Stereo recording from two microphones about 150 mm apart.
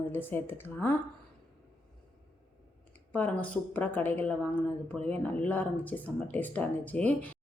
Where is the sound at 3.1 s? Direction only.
10° left (ahead or behind).